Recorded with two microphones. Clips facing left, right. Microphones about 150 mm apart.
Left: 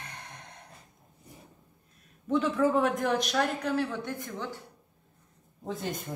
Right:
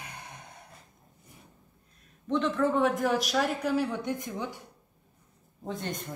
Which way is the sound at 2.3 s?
5° left (ahead or behind).